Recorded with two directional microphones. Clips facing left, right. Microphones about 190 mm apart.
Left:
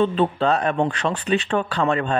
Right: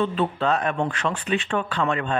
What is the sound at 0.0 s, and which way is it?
Speech, 30° left (ahead or behind).